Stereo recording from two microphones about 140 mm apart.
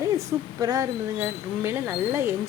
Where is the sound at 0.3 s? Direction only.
25° right (ahead or behind).